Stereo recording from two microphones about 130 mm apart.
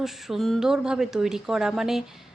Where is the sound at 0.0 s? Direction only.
Centre (ahead or behind).